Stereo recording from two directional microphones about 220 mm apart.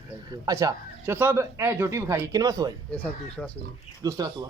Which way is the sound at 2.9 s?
5° left (ahead or behind).